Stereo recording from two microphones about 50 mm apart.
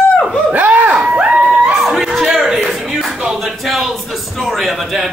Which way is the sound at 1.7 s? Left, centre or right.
Centre.